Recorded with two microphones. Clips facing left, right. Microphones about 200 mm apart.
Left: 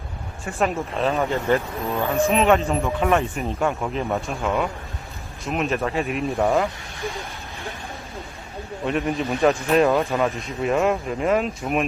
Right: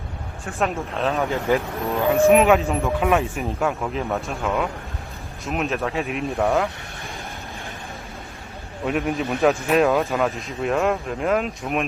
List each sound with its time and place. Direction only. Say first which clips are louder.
0.4 s a man's voice: left 1 dB; centre (ahead or behind)
1.5 s speech: right 1 dB; 15° right (ahead or behind)
2.4 s a man's voice: right 1 dB; centre (ahead or behind)
8.9 s a man's voice: even; centre (ahead or behind)